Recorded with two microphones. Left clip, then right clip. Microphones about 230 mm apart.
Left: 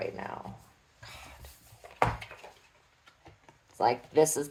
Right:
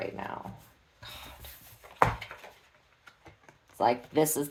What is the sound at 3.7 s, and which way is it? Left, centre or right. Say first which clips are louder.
Speech: left 1 dB; right.